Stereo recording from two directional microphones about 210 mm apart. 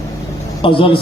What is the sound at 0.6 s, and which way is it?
Speech, 25° left (ahead or behind).